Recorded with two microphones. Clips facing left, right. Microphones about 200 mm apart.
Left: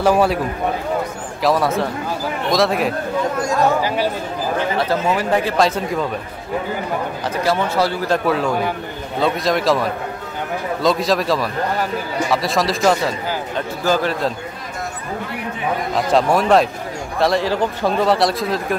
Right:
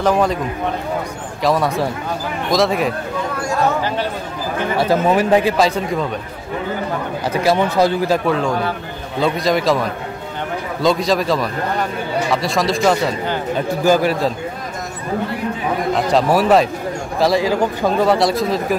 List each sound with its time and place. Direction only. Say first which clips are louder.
0.0 s speech: left 1 dB; 10° left (ahead or behind)
1.4 s speech: even; centre (ahead or behind)
4.7 s speech: right 8 dB; 15° right (ahead or behind)
7.4 s speech: right 3 dB; 15° right (ahead or behind)
8.1 s speech: right 1 dB; 5° left (ahead or behind)
13.8 s speech: right 3 dB; 10° right (ahead or behind)
15.9 s speech: right 1 dB; centre (ahead or behind)